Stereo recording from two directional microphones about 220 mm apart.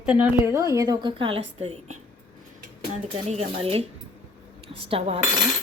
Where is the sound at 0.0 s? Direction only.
5° right (ahead or behind); by 1.8 s 25° right (ahead or behind).